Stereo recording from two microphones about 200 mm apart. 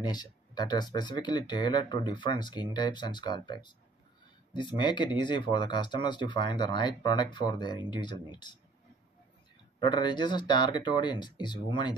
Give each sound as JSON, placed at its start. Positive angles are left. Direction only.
{"t": 0.0, "sound": "speech", "side_deg": 20}
{"t": 9.8, "sound": "speech", "side_deg": 20}